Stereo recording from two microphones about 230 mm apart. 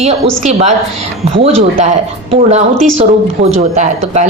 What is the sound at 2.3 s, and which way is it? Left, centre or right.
A woman's voice, right.